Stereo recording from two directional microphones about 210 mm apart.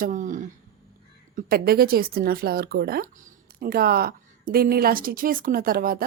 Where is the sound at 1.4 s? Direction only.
45° right (ahead or behind).